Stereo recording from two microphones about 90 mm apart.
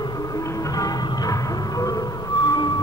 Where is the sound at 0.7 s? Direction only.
45° left (ahead or behind).